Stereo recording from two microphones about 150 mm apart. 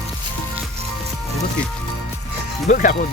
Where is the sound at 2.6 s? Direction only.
65° left (ahead or behind).